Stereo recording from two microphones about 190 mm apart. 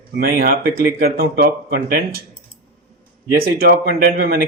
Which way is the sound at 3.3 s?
55° right (ahead or behind).